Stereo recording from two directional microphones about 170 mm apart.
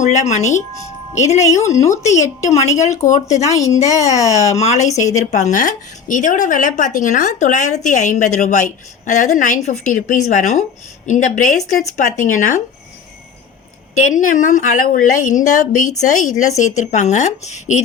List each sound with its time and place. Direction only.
0.0 s speech: 45° left (ahead or behind)
1.8 s speech: 15° left (ahead or behind)
2.0 s a woman's voice: 40° left (ahead or behind)
4.2 s speech: 20° left (ahead or behind)
4.5 s a woman's voice: 40° left (ahead or behind)
4.9 s speech: 20° left (ahead or behind)
5.1 s speech: 45° left (ahead or behind)
13.9 s speech: 50° left (ahead or behind)